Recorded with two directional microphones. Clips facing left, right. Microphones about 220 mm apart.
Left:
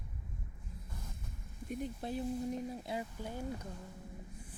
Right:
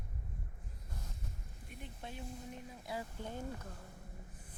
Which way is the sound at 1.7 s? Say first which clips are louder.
Left 11 dB; 40° left (ahead or behind).